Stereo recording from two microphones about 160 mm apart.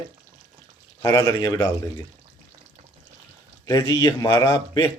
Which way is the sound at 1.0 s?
15° left (ahead or behind).